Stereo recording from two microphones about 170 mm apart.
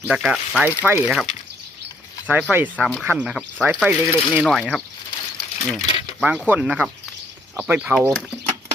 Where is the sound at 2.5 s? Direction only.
10° right (ahead or behind).